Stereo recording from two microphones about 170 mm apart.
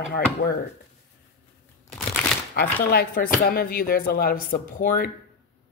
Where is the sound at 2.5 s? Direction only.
65° left (ahead or behind).